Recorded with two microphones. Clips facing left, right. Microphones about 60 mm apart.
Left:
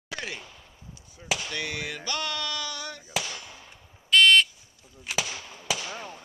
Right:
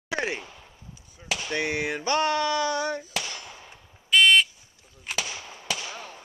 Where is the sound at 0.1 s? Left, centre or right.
Right.